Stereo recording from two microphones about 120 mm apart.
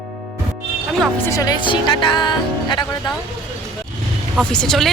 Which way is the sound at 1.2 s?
25° left (ahead or behind).